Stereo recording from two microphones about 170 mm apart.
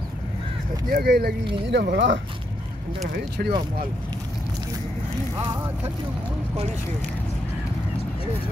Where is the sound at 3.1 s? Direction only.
70° right (ahead or behind).